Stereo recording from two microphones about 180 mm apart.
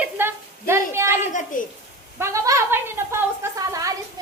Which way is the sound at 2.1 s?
15° right (ahead or behind).